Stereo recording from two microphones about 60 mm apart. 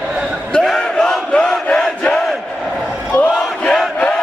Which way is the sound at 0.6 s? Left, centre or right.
Centre.